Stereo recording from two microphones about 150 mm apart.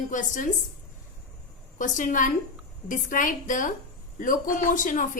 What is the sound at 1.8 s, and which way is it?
A woman's voice, 60° left (ahead or behind).